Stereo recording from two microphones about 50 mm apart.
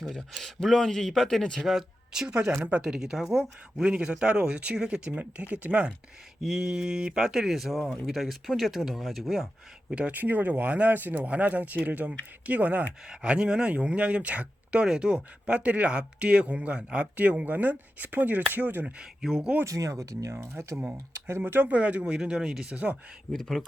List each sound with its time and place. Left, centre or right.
0.3 s speech: centre
1.7 s speech: centre
6.4 s speech: centre
10.1 s speech: right
13.1 s speech: centre; by 18.9 s right
18.9 s speech: centre
19.6 s speech: right
20.4 s speech: right
21.4 s speech: right
21.7 s speech: right
23.3 s speech: centre